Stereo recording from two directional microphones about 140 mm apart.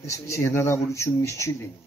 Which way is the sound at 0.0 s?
20° left (ahead or behind).